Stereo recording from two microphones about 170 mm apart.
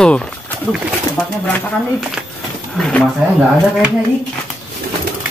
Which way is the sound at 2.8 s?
5° left (ahead or behind).